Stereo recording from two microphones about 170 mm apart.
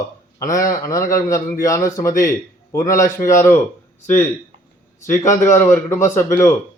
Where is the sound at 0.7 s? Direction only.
20° left (ahead or behind).